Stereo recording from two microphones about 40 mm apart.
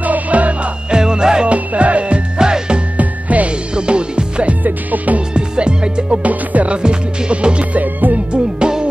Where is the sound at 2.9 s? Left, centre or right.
Right.